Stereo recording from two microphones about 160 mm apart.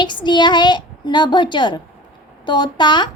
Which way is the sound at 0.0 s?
30° left (ahead or behind).